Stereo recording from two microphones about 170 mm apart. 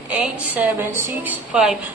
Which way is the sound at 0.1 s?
10° right (ahead or behind).